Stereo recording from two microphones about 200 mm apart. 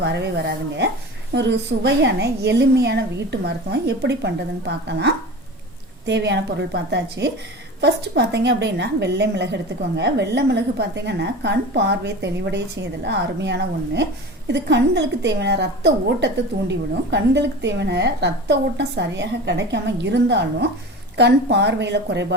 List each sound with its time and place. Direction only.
0.0 s a woman's voice: 55° right (ahead or behind)